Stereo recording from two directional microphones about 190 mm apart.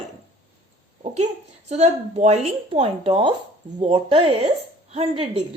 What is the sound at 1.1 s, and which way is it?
A woman's voice, 35° right (ahead or behind).